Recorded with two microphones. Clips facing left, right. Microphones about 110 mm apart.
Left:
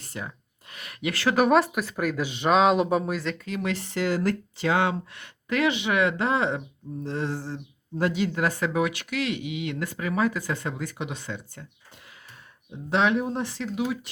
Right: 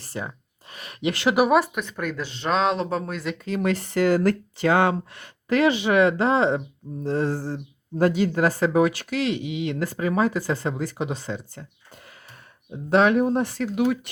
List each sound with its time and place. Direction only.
0.0 s rub: 30° right (ahead or behind)
0.7 s a sound: 30° right (ahead or behind)
1.4 s speech: 5° right (ahead or behind)
3.3 s speech: 30° right (ahead or behind)
3.6 s speech: 45° right (ahead or behind)
12.9 s speech: 50° right (ahead or behind)